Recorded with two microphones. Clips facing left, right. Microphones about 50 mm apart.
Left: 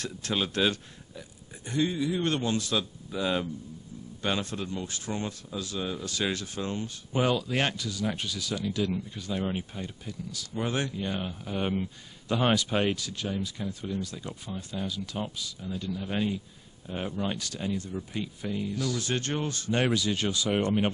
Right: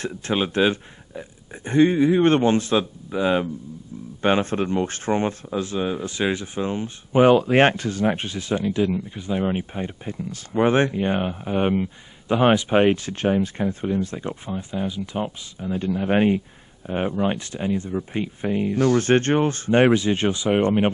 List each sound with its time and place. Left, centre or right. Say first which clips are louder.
0.0 s speech: right 7 dB; right
15.7 s speech: right 12 dB; right